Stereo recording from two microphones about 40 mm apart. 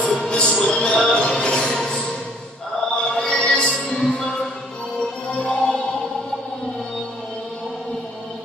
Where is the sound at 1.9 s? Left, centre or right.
Centre.